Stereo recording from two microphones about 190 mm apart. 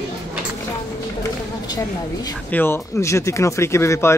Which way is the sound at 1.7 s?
20° left (ahead or behind).